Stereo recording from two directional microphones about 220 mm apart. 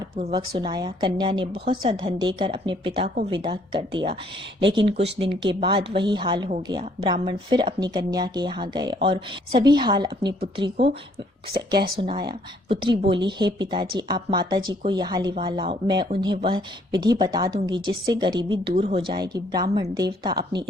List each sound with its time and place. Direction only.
0.2 s a woman's voice: 25° right (ahead or behind)
11.5 s speech: 45° right (ahead or behind)
11.9 s a woman's voice: 25° right (ahead or behind)